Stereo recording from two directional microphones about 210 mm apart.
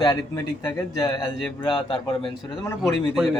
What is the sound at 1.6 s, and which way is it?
Speech, 20° left (ahead or behind).